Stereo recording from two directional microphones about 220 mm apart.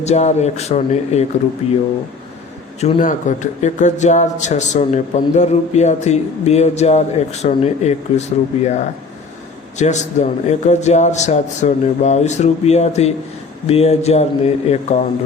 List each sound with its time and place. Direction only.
0.0 s speech: 30° left (ahead or behind)
2.8 s a man's voice: 35° left (ahead or behind)
9.7 s a man's voice: 30° left (ahead or behind)